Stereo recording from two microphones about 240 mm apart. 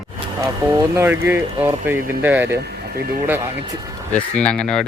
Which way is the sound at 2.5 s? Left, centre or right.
Right.